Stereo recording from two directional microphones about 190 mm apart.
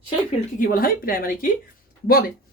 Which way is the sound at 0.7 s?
50° left (ahead or behind).